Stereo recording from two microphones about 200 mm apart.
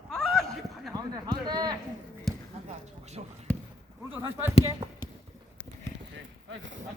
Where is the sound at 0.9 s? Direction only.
20° right (ahead or behind).